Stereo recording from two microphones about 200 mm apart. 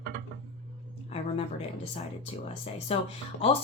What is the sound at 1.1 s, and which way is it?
A woman's voice, 30° left (ahead or behind).